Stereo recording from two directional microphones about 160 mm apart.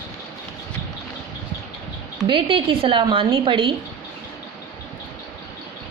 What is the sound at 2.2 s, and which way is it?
A woman's voice, 30° right (ahead or behind).